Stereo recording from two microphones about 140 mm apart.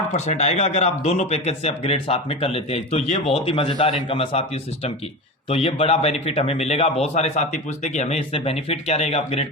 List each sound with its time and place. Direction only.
0.1 s speech: 55° left (ahead or behind)